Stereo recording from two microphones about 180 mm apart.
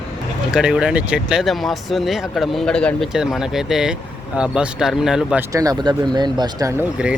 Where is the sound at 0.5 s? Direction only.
5° right (ahead or behind).